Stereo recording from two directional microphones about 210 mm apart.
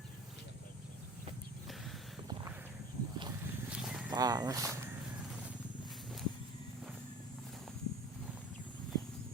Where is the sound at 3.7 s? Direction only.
5° right (ahead or behind).